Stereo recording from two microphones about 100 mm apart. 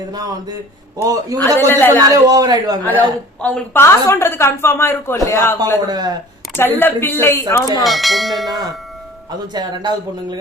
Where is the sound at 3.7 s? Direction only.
25° left (ahead or behind).